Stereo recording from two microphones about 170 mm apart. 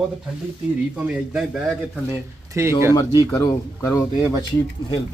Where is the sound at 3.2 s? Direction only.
20° left (ahead or behind).